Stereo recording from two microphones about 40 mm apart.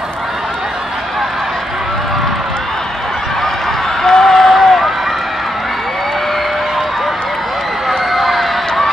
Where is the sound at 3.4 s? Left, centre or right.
Centre.